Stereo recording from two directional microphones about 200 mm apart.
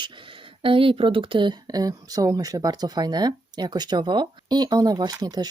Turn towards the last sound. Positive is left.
turn(degrees=-20)  # may be behind; listen again after turning